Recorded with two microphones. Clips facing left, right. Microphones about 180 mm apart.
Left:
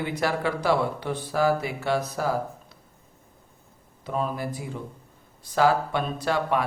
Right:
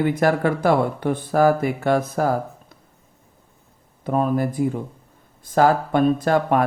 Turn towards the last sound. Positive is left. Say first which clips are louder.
# right 6 dB
turn(degrees=-50)  # may be behind; listen again after turning